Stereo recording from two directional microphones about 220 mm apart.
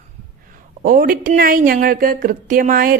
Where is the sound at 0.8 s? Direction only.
40° right (ahead or behind).